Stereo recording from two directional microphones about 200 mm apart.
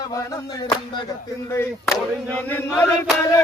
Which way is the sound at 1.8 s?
10° left (ahead or behind).